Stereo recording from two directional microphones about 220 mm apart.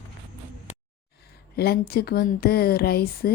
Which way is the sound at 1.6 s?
45° left (ahead or behind).